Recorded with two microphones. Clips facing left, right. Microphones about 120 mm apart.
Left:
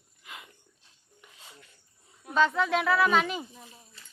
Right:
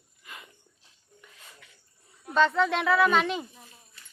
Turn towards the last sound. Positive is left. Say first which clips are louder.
# right 2 dB
turn(degrees=0)  # may be behind; listen again after turning